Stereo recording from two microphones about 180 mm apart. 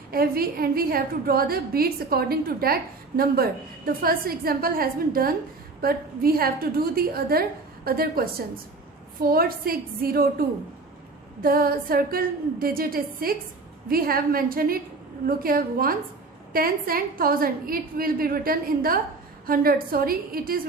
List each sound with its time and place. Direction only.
0.1 s a woman's voice: 55° right (ahead or behind)
11.4 s a woman's voice: 55° right (ahead or behind)